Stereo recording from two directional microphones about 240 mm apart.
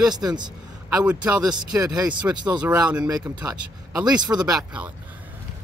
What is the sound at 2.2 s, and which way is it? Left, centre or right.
Speech, centre.